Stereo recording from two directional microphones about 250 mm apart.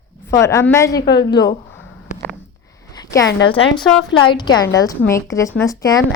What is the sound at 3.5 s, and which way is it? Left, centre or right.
Speech, left.